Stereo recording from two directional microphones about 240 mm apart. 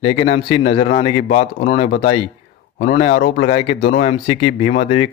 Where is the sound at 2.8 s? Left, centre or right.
Left.